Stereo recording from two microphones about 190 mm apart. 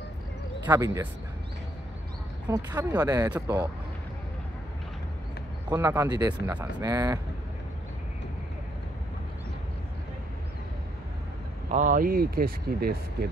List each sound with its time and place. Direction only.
0.7 s speech: 15° right (ahead or behind)
2.4 s speech: 20° right (ahead or behind)
5.7 s speech: 15° right (ahead or behind)
11.7 s speech: 45° right (ahead or behind)